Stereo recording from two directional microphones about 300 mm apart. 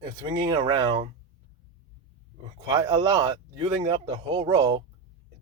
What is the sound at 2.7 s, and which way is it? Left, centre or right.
Speech, centre.